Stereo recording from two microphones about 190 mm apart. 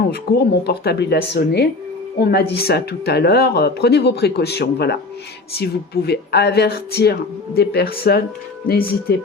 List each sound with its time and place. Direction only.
0.1 s speech: 60° left (ahead or behind)